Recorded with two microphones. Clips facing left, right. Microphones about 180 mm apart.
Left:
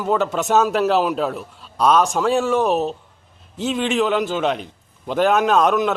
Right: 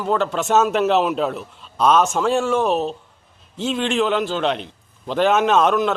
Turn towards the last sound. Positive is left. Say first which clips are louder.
# even
turn(degrees=0)  # may be behind; listen again after turning